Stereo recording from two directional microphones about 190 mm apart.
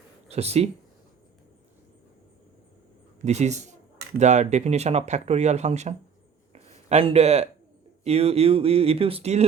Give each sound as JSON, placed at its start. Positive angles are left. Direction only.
{"t": 0.3, "sound": "speech", "side_deg": -35}
{"t": 3.2, "sound": "speech", "side_deg": -35}
{"t": 6.5, "sound": "a sound", "side_deg": -35}
{"t": 8.0, "sound": "speech", "side_deg": -30}